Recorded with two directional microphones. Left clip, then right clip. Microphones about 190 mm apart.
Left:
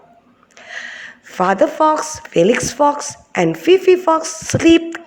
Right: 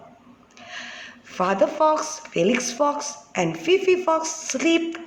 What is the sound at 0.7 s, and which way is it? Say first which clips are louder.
A woman's voice: left 7 dB; 40° left (ahead or behind).